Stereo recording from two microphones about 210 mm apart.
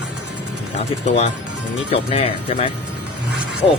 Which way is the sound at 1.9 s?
30° left (ahead or behind).